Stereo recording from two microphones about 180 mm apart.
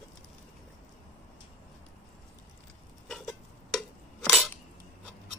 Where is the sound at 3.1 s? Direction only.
Centre (ahead or behind).